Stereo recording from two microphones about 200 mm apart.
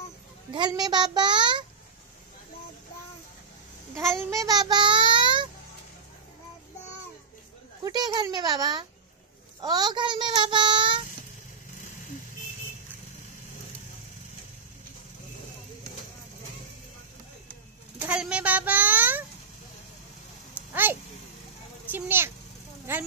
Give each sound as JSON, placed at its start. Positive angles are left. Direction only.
{"t": 0.5, "sound": "a child's voice", "side_deg": -20}
{"t": 4.1, "sound": "child singing", "side_deg": -15}
{"t": 7.8, "sound": "speech", "side_deg": -20}
{"t": 17.9, "sound": "a child's voice", "side_deg": -5}
{"t": 20.5, "sound": "a sound", "side_deg": -10}
{"t": 21.9, "sound": "a child's voice", "side_deg": -10}